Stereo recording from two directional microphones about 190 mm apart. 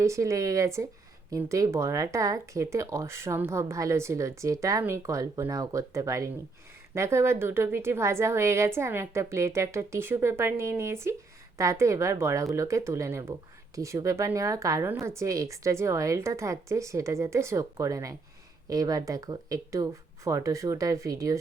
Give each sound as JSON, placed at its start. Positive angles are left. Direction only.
{"t": 0.0, "sound": "speech", "side_deg": -15}